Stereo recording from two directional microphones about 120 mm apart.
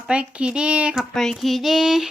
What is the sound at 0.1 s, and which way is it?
Speech, 10° right (ahead or behind).